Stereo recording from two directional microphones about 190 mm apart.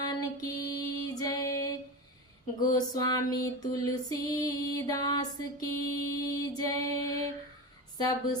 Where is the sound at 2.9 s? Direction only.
20° left (ahead or behind).